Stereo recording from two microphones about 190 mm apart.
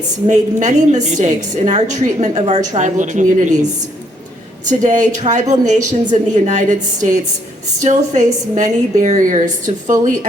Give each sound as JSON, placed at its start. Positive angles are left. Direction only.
{"t": 0.3, "sound": "a woman's voice", "side_deg": -40}